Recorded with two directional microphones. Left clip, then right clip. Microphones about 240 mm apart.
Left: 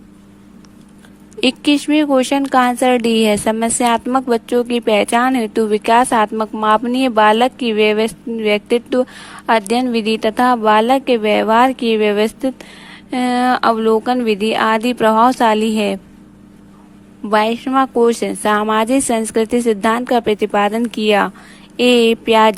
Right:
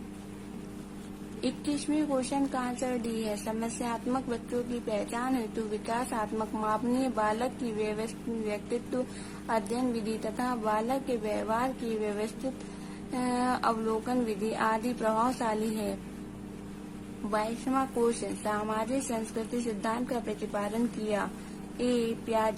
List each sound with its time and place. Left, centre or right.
1.4 s a woman's voice: left
17.3 s a woman's voice: left
21.8 s a woman's voice: left